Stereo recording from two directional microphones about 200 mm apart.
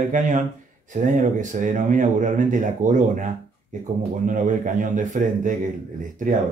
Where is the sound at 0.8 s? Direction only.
40° right (ahead or behind).